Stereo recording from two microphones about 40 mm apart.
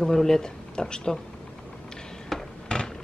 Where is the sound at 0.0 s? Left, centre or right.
Centre.